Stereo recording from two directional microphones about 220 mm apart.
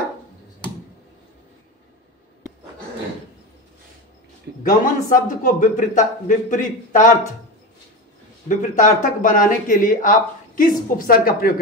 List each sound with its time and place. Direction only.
4.6 s speech: 35° left (ahead or behind)
8.5 s speech: 35° left (ahead or behind)